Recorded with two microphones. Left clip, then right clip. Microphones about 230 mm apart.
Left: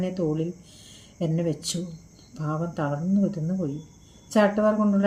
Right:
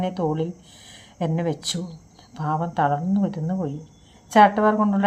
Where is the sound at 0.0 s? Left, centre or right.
Centre.